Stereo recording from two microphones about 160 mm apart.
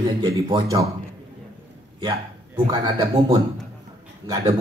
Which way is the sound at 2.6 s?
35° right (ahead or behind).